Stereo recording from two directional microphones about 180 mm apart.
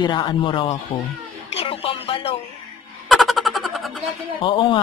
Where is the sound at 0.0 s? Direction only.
25° left (ahead or behind).